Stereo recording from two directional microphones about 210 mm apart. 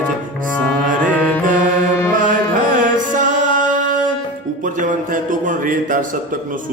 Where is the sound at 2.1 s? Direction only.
40° right (ahead or behind).